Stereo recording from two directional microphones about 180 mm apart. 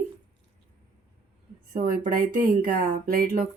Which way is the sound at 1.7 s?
50° right (ahead or behind).